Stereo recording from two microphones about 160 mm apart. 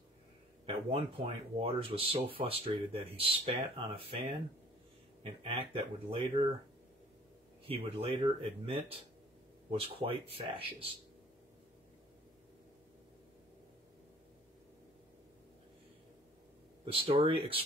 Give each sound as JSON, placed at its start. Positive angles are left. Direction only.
{"t": 0.7, "sound": "speech", "side_deg": -35}
{"t": 5.2, "sound": "speech", "side_deg": -40}
{"t": 7.6, "sound": "speech", "side_deg": -35}
{"t": 16.8, "sound": "speech", "side_deg": -35}